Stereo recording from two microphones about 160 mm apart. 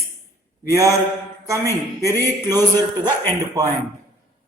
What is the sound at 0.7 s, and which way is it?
Speech, 20° right (ahead or behind).